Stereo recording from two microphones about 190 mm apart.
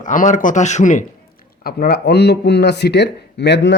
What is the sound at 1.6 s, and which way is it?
Speech, 55° left (ahead or behind).